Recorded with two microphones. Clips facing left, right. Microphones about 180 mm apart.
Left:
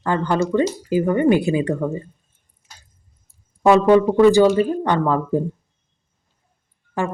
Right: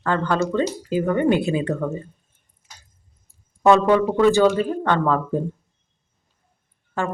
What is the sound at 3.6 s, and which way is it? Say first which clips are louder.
Speech: left 2 dB; 10° left (ahead or behind).